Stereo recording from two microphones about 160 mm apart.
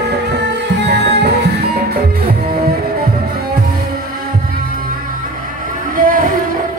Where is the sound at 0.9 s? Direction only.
85° right.